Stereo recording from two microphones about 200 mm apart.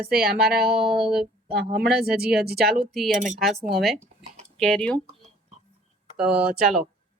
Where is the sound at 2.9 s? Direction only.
Centre (ahead or behind).